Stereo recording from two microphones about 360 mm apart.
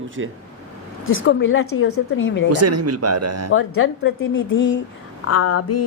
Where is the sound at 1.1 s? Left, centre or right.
Left.